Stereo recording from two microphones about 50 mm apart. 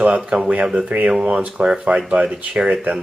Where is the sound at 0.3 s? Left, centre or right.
Right.